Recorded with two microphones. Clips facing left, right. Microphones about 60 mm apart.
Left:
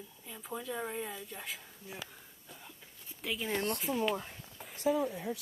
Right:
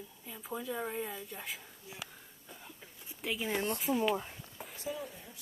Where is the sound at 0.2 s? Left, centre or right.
Centre.